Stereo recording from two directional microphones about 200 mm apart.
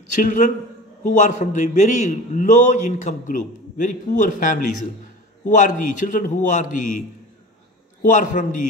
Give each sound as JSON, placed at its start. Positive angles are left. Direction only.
{"t": 0.2, "sound": "a man's voice", "side_deg": 40}
{"t": 8.0, "sound": "a man's voice", "side_deg": 40}